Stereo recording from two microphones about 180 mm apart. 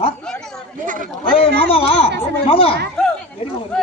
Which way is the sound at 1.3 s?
30° left (ahead or behind).